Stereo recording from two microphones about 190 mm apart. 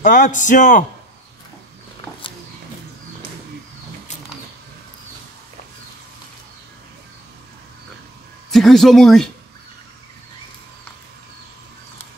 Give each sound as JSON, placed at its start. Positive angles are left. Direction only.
{"t": 0.0, "sound": "a man's voice", "side_deg": 40}
{"t": 8.5, "sound": "speech", "side_deg": 0}